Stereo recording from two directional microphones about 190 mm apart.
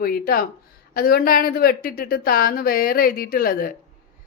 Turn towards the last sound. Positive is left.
turn(degrees=50)  # may be behind; listen again after turning